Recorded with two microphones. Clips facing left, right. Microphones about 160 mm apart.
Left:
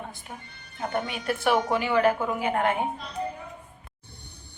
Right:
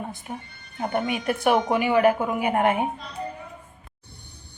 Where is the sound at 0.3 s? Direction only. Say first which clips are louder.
Right 7 dB; 25° right (ahead or behind).